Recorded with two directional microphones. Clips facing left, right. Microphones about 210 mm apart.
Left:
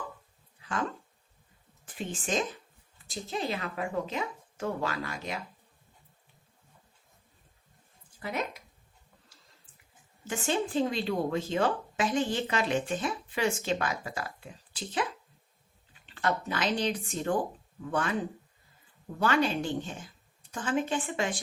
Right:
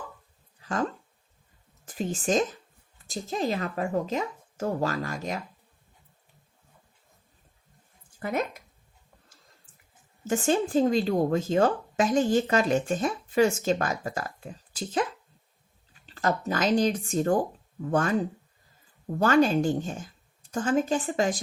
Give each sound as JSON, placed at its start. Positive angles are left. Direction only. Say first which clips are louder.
{"t": 0.6, "sound": "a sound", "louder": "right 5 dB", "side_deg": -40}
{"t": 1.8, "sound": "speech", "louder": "right 6 dB", "side_deg": -40}
{"t": 8.2, "sound": "speech", "louder": "right 5 dB", "side_deg": -50}
{"t": 10.2, "sound": "speech", "louder": "right 6 dB", "side_deg": -45}
{"t": 16.0, "sound": "speech", "louder": "right 3 dB", "side_deg": -40}
{"t": 19.2, "sound": "speech", "louder": "right 6 dB", "side_deg": -45}